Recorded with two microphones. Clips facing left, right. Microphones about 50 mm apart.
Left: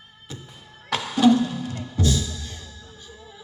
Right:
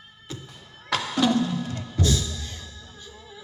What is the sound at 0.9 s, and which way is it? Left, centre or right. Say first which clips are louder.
Music: left 4 dB; left.